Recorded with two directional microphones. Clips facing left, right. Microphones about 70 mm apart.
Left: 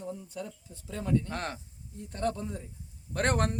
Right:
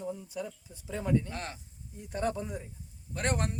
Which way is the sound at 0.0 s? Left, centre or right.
Centre.